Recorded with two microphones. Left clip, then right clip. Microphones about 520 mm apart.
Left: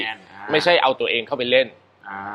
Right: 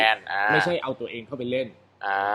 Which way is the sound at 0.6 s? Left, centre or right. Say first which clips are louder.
Left 8 dB; left.